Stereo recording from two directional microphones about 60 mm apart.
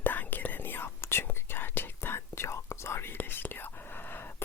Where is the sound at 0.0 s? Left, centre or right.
Left.